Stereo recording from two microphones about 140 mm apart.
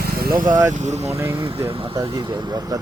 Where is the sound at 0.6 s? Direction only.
55° right (ahead or behind).